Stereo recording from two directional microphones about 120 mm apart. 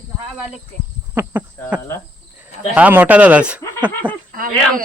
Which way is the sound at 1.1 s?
15° right (ahead or behind).